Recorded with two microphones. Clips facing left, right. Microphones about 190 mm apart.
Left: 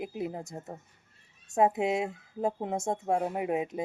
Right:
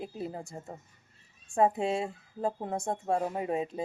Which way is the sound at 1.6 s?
15° left (ahead or behind).